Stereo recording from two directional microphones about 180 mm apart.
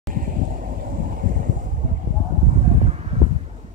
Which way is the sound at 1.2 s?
50° right (ahead or behind).